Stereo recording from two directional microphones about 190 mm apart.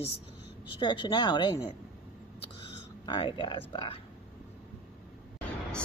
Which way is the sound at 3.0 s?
25° left (ahead or behind).